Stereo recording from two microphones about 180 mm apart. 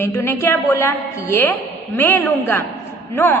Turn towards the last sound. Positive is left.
turn(degrees=15)  # may be behind; listen again after turning